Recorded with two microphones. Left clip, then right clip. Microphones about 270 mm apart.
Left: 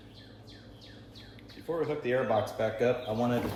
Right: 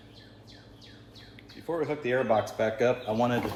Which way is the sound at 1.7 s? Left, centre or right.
Right.